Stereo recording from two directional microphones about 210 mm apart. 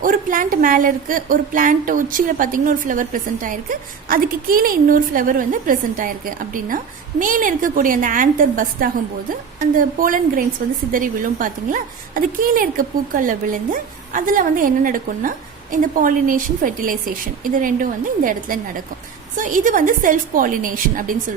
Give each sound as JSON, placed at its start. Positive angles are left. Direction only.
{"t": 0.0, "sound": "a woman's voice", "side_deg": -40}